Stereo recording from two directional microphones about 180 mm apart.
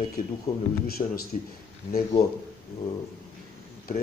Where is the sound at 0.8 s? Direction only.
55° left (ahead or behind).